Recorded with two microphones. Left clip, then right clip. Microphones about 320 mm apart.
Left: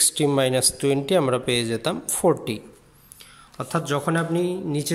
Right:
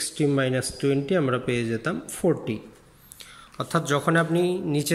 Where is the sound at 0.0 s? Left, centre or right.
Centre.